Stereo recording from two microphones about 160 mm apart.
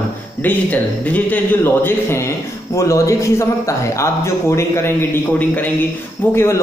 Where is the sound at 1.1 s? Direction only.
10° left (ahead or behind).